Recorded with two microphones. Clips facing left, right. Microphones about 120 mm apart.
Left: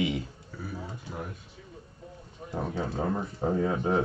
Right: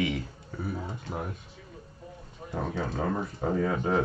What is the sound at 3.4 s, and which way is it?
Speech, 20° left (ahead or behind).